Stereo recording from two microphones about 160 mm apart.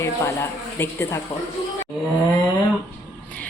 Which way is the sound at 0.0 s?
15° left (ahead or behind).